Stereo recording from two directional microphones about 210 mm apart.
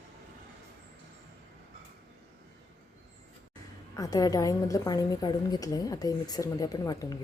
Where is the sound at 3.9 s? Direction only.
15° left (ahead or behind).